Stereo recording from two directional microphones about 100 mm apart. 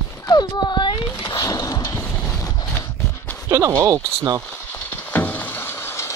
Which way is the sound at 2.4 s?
40° left (ahead or behind).